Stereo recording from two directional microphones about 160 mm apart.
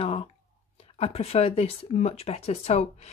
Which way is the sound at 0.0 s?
35° left (ahead or behind).